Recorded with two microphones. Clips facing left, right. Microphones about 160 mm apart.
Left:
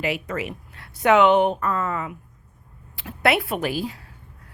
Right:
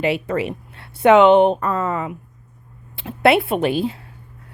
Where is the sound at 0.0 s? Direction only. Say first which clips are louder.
Right 6 dB; 30° right (ahead or behind).